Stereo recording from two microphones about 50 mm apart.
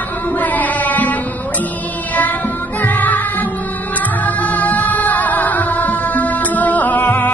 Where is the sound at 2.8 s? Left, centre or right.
Left.